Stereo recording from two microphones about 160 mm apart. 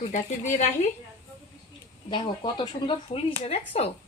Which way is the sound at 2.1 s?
30° left (ahead or behind).